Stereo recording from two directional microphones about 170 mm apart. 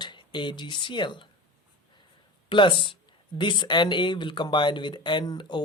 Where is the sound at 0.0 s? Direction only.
25° left (ahead or behind).